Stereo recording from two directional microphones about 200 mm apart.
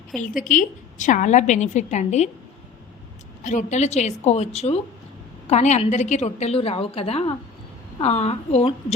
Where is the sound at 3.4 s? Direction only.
35° left (ahead or behind).